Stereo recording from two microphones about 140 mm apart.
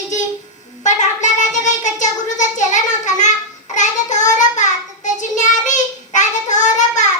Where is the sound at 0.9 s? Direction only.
60° left (ahead or behind).